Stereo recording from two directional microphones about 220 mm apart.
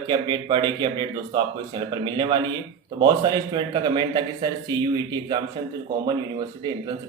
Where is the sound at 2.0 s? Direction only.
20° right (ahead or behind).